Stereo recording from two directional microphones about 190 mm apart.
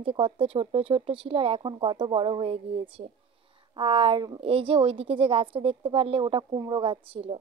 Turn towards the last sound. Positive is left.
turn(degrees=-30)  # may be behind; listen again after turning